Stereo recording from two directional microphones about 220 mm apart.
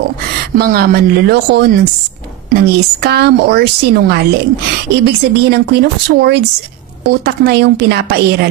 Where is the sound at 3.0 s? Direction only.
50° right (ahead or behind).